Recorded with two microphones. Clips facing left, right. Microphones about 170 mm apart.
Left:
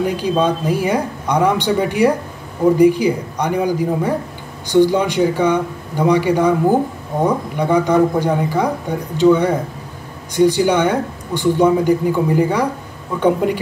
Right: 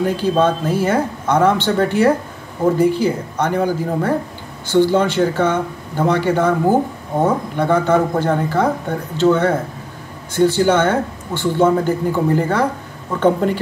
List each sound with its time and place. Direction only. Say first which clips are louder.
0.0 s a man's voice: right 1 dB; 15° left (ahead or behind)
7.5 s a man's voice: left 2 dB; 15° left (ahead or behind)